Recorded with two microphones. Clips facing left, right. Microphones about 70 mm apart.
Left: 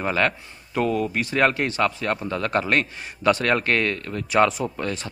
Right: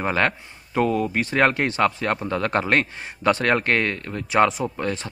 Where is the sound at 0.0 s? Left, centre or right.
Right.